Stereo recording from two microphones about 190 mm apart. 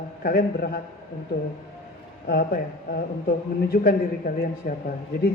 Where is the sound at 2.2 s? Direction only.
55° left (ahead or behind).